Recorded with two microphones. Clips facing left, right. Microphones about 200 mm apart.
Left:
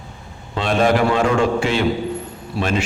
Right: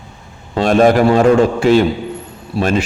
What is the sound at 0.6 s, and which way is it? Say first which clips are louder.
A man's voice: right 6 dB; 45° right (ahead or behind).